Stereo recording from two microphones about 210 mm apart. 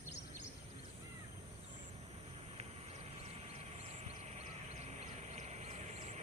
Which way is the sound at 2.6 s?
30° right (ahead or behind).